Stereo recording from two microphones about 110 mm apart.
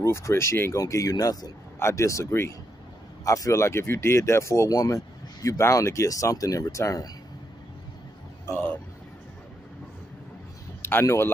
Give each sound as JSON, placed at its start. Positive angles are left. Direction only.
{"t": 0.0, "sound": "speech", "side_deg": 25}
{"t": 10.8, "sound": "speech", "side_deg": 20}